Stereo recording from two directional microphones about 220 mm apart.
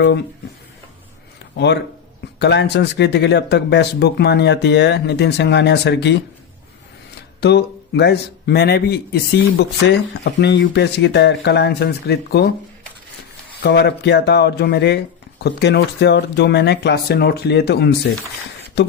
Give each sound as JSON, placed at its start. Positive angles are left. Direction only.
{"t": 1.5, "sound": "a man's voice", "side_deg": 50}
{"t": 7.4, "sound": "a man's voice", "side_deg": 50}
{"t": 13.6, "sound": "a man's voice", "side_deg": 50}